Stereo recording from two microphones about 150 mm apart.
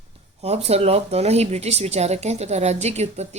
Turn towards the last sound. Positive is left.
turn(degrees=-45)  # may be behind; listen again after turning